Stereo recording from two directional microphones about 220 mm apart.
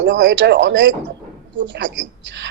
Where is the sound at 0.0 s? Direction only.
55° right (ahead or behind).